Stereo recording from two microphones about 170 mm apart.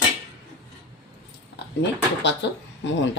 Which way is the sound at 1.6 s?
80° left.